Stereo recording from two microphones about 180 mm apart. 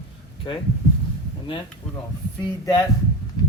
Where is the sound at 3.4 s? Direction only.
20° left (ahead or behind).